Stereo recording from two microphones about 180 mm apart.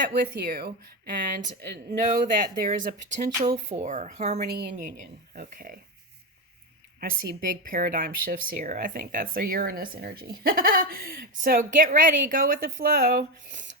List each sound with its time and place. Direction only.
0.1 s speech: 60° right (ahead or behind)
1.5 s speech: 45° right (ahead or behind)
4.4 s speech: 60° right (ahead or behind)
5.3 s speech: 50° right (ahead or behind)
7.0 s speech: 50° right (ahead or behind)